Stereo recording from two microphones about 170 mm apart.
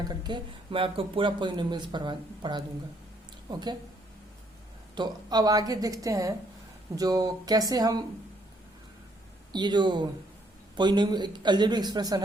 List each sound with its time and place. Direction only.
0.1 s speech: 25° right (ahead or behind)
4.9 s speech: 25° right (ahead or behind)
9.5 s speech: 25° right (ahead or behind)